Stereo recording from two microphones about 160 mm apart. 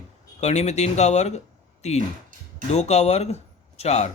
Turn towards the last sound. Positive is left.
turn(degrees=45)  # may be behind; listen again after turning